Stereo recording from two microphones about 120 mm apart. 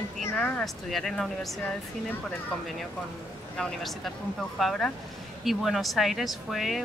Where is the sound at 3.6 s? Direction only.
Centre (ahead or behind).